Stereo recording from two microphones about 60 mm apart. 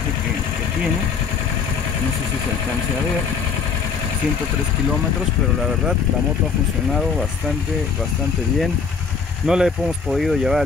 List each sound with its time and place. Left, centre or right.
6.9 s speech: centre
9.5 s speech: centre